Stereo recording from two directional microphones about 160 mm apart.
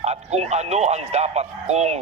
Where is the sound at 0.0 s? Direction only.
40° right (ahead or behind).